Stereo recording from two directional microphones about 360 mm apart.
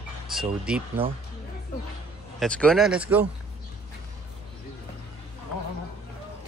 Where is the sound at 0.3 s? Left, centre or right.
Centre.